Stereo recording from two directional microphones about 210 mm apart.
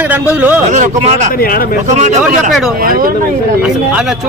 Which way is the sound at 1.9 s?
35° right (ahead or behind).